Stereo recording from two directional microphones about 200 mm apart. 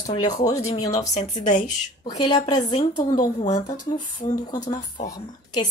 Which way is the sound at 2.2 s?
20° left (ahead or behind).